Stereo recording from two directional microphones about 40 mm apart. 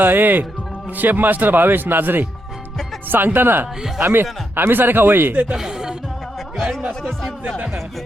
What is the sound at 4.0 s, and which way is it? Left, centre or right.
Speech, right.